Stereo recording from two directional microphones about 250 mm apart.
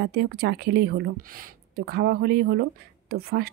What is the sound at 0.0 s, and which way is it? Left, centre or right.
Speech, right.